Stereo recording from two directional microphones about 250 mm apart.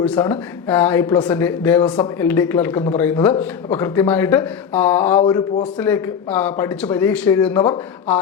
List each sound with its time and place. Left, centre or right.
0.0 s speech: centre
5.2 s a man's voice: centre
5.8 s speech: centre